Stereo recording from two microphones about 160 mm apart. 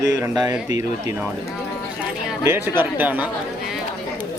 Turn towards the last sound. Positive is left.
turn(degrees=-10)  # may be behind; listen again after turning